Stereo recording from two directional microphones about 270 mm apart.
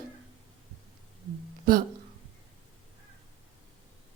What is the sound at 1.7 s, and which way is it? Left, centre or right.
Speech, right.